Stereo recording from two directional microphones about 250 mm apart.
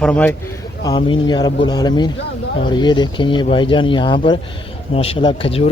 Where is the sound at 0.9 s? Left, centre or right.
Centre.